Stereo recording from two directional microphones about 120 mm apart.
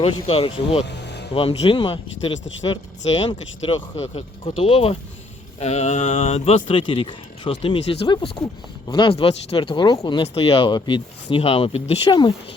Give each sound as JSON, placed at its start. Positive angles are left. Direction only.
{"t": 0.0, "sound": "speech", "side_deg": 50}
{"t": 5.5, "sound": "a sound", "side_deg": 65}
{"t": 6.1, "sound": "speech", "side_deg": 55}